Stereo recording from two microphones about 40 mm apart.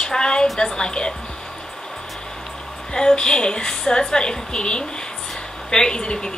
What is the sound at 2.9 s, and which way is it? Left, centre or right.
A woman's voice, centre.